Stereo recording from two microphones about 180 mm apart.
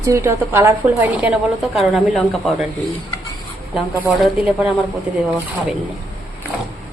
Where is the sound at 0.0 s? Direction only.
15° right (ahead or behind).